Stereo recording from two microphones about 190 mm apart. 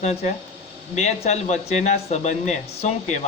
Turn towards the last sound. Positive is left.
turn(degrees=40)  # may be behind; listen again after turning